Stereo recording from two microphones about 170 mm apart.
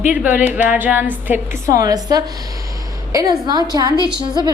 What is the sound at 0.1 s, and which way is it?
A woman's voice, 10° right (ahead or behind).